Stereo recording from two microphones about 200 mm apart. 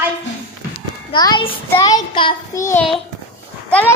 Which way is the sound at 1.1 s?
20° left (ahead or behind).